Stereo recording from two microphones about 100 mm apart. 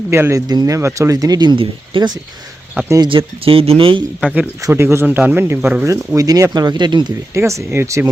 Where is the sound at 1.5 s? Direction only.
60° right (ahead or behind).